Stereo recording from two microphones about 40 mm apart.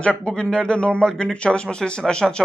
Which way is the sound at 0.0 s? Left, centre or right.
Left.